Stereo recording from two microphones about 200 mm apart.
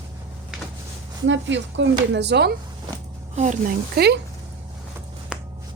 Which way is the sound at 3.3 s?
35° right (ahead or behind).